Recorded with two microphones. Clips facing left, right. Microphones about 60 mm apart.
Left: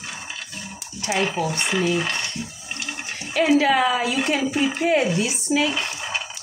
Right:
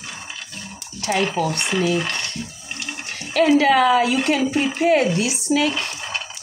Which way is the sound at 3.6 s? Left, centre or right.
Right.